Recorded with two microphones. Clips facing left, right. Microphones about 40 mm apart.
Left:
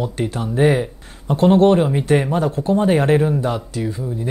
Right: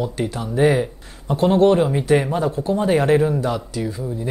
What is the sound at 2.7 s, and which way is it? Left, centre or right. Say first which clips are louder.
Speech: left 1 dB; left.